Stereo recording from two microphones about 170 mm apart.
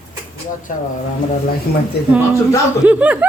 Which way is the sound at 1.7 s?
70° left (ahead or behind).